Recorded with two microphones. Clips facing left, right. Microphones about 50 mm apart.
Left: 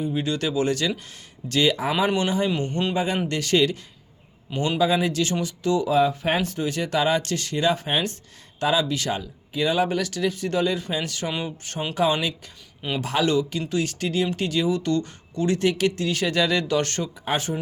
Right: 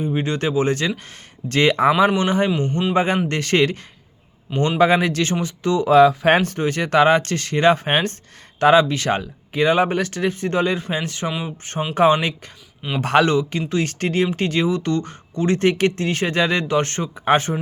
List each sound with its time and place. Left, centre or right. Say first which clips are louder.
0.0 s speech: right 3 dB; right
2.1 s speech: right 4 dB; right
2.6 s a man's voice: right 4 dB; right
2.9 s speech: right 5 dB; right
4.8 s speech: right 5 dB; right
5.9 s speech: right 11 dB; right
6.4 s speech: right 4 dB; right
17.2 s speech: right 9 dB; right